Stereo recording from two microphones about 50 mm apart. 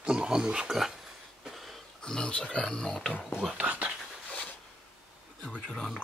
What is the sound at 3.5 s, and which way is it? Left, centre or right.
Speech, right.